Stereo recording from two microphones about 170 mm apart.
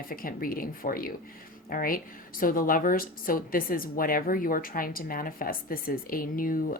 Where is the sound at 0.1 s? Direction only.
60° left (ahead or behind).